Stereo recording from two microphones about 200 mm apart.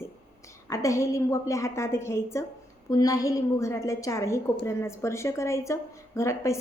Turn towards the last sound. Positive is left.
turn(degrees=15)  # may be behind; listen again after turning